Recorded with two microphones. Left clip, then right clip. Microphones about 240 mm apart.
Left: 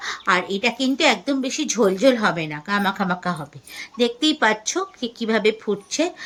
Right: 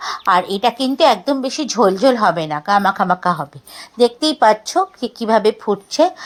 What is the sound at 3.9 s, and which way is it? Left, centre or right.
A woman's voice, centre.